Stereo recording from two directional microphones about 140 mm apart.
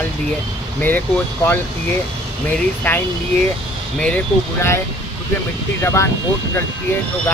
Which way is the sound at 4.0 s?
15° left (ahead or behind).